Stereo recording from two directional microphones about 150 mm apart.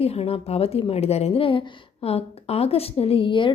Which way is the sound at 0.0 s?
40° left (ahead or behind).